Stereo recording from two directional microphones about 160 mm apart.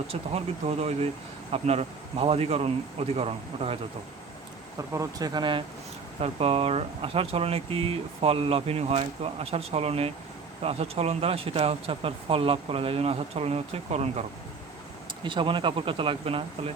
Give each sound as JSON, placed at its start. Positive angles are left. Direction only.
{"t": 0.1, "sound": "speech", "side_deg": -40}
{"t": 4.8, "sound": "speech", "side_deg": -20}
{"t": 15.2, "sound": "speech", "side_deg": -30}